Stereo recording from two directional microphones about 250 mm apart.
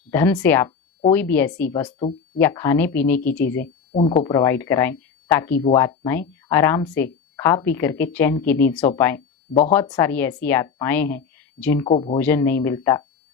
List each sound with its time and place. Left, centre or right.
0.1 s speech: centre
11.9 s speech: left
12.1 s speech: centre